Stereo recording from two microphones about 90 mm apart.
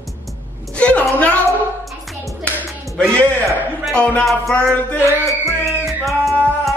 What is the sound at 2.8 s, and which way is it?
Speech, 10° left (ahead or behind).